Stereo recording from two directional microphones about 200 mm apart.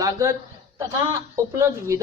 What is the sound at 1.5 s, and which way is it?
Speech, 15° right (ahead or behind).